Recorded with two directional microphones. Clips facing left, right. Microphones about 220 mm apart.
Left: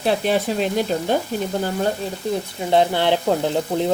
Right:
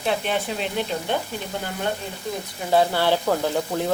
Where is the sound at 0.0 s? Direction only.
35° left (ahead or behind).